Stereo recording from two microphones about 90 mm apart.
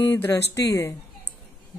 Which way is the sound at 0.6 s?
35° left (ahead or behind).